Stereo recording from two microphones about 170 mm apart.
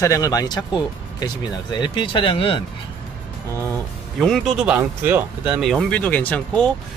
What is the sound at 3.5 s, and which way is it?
Speech, 15° left (ahead or behind).